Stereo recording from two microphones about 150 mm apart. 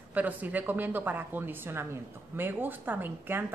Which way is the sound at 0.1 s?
10° right (ahead or behind).